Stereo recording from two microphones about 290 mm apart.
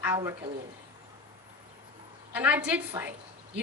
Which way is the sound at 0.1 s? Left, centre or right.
Centre.